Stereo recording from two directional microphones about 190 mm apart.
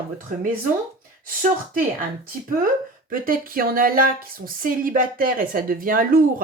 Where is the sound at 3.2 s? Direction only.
50° right (ahead or behind).